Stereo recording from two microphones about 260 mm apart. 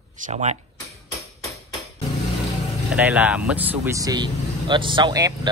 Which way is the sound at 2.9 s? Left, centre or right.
Centre.